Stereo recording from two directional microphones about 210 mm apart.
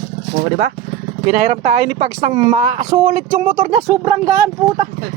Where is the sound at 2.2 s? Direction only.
30° right (ahead or behind).